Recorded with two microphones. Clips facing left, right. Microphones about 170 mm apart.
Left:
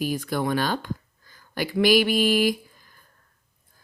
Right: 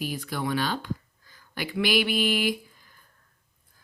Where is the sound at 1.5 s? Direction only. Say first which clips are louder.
Left 6 dB; 40° left (ahead or behind).